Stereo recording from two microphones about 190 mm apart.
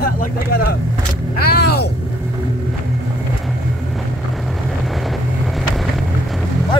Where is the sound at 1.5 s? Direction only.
55° left (ahead or behind).